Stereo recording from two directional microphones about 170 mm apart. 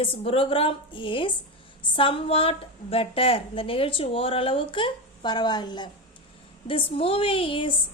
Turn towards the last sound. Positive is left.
turn(degrees=30)  # may be behind; listen again after turning